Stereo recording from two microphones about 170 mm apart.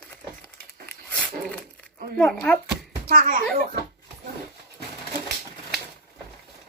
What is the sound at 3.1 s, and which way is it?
Speech, 55° right (ahead or behind).